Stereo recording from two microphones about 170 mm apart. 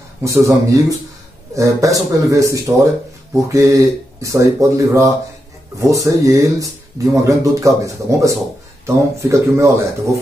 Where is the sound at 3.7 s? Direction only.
20° right (ahead or behind).